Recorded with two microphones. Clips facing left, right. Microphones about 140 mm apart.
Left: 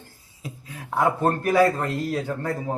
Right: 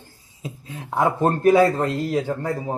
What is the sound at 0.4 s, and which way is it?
A man's voice, 25° right (ahead or behind).